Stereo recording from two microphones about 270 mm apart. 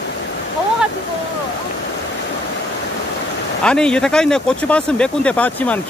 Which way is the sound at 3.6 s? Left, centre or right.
Centre.